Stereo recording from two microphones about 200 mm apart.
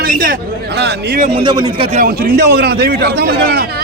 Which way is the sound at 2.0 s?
50° right (ahead or behind).